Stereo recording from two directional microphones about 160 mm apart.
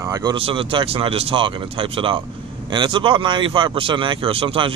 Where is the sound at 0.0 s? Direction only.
25° right (ahead or behind).